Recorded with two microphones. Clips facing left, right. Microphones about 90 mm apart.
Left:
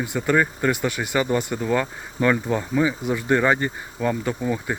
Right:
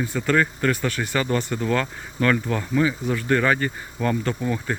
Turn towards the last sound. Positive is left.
turn(degrees=10)  # may be behind; listen again after turning